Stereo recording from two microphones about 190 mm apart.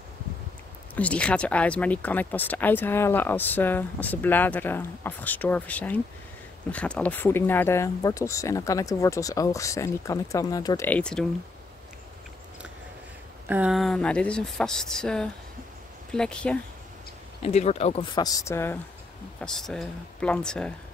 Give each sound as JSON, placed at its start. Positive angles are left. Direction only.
{"t": 0.9, "sound": "speech", "side_deg": 5}
{"t": 10.9, "sound": "speech", "side_deg": 5}
{"t": 13.5, "sound": "speech", "side_deg": -5}
{"t": 17.4, "sound": "speech", "side_deg": 35}